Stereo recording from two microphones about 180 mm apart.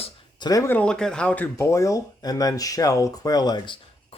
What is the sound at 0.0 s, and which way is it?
Speech, 25° left (ahead or behind).